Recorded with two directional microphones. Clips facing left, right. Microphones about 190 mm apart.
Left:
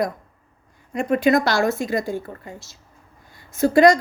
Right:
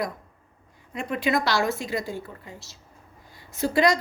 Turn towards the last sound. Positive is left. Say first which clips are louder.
# left 7 dB
turn(degrees=45)  # may be behind; listen again after turning